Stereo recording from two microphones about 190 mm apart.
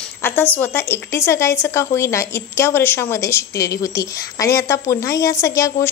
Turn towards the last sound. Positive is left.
turn(degrees=15)  # may be behind; listen again after turning